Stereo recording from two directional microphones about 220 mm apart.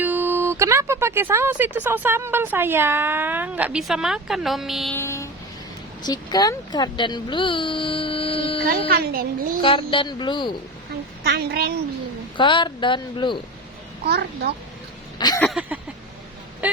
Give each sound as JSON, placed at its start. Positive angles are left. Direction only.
{"t": 0.0, "sound": "speech", "side_deg": -10}
{"t": 4.9, "sound": "vehicle", "side_deg": 10}
{"t": 6.0, "sound": "speech", "side_deg": 15}
{"t": 8.9, "sound": "a woman's voice", "side_deg": -40}
{"t": 9.6, "sound": "speech", "side_deg": 25}
{"t": 11.2, "sound": "a woman's voice", "side_deg": -45}
{"t": 12.4, "sound": "speech", "side_deg": 20}
{"t": 14.0, "sound": "a woman's voice", "side_deg": -45}
{"t": 15.2, "sound": "a sound", "side_deg": 15}
{"t": 15.4, "sound": "a sound", "side_deg": -5}